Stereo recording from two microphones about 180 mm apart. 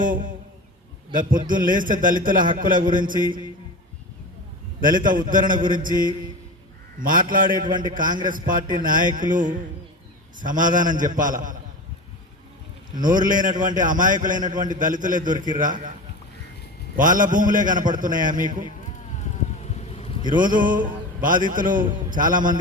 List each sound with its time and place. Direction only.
0.0 s a man's voice: 50° right (ahead or behind)
4.8 s a man's voice: 50° right (ahead or behind)
13.0 s a man's voice: 45° right (ahead or behind)
17.0 s a man's voice: 45° right (ahead or behind)
19.2 s a sound: 40° left (ahead or behind)
20.3 s a man's voice: 50° right (ahead or behind)